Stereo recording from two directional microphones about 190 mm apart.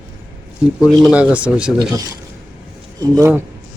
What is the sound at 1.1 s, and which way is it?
Speech, 5° right (ahead or behind).